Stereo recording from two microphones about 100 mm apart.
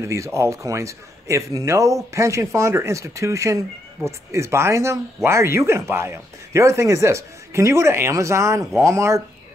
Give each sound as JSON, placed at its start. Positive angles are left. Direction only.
{"t": 0.0, "sound": "a man's voice", "side_deg": -30}